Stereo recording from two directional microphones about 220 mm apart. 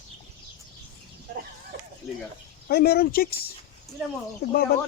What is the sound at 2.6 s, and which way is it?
Speech, 45° left (ahead or behind).